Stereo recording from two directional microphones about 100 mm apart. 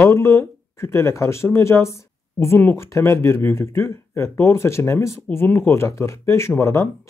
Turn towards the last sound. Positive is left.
turn(degrees=30)  # may be behind; listen again after turning